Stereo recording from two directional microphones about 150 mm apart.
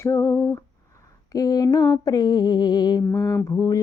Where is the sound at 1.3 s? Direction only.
25° left (ahead or behind).